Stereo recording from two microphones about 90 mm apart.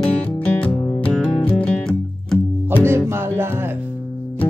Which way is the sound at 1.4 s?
15° left (ahead or behind).